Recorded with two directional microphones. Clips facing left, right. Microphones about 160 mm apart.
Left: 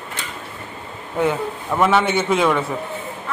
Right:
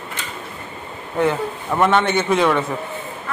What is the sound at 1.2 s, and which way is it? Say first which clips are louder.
A man's voice: right 1 dB; 5° left (ahead or behind).